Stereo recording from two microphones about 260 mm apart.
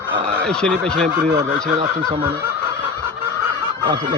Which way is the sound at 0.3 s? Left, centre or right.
Centre.